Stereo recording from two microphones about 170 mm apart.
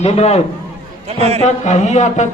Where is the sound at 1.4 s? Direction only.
45° left (ahead or behind).